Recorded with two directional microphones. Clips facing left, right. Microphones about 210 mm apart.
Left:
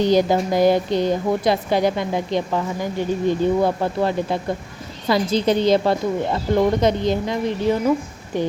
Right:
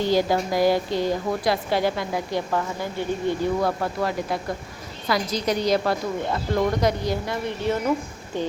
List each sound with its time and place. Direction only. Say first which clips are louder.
0.0 s a woman's voice: left 4 dB; 20° left (ahead or behind)